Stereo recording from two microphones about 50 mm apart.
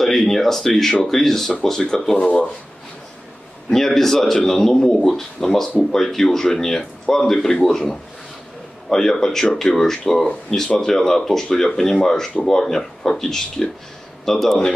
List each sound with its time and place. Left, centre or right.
0.0 s speech: centre
2.1 s speech: left
3.7 s speech: centre